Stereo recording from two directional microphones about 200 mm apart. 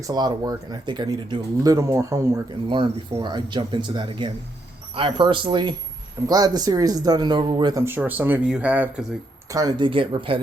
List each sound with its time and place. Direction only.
0.1 s speech: 20° right (ahead or behind)
9.5 s speech: 20° right (ahead or behind)